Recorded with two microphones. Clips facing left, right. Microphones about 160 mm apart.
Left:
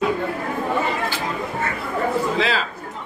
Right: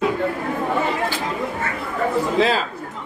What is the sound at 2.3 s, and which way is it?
Speech, 45° right (ahead or behind).